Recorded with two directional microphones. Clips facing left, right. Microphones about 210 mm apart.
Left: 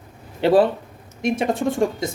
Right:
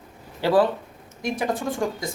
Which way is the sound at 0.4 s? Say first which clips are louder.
Left 4 dB; 25° left (ahead or behind).